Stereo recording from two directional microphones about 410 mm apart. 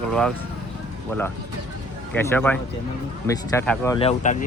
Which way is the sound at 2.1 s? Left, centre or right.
Centre.